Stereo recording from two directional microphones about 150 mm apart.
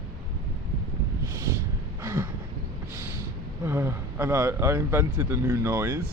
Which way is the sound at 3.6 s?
15° right (ahead or behind).